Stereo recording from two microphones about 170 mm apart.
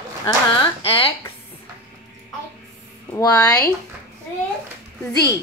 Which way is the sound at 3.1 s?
20° left (ahead or behind).